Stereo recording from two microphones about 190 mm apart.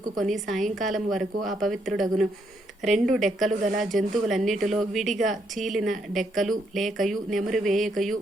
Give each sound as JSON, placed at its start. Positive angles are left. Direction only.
{"t": 0.2, "sound": "speech", "side_deg": 0}